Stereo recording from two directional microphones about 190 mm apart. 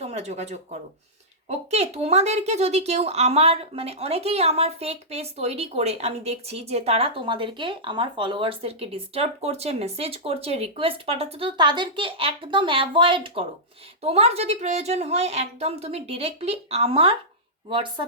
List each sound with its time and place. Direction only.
0.0 s speech: 35° right (ahead or behind)